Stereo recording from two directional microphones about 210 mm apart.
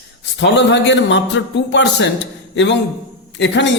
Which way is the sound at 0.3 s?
60° left (ahead or behind).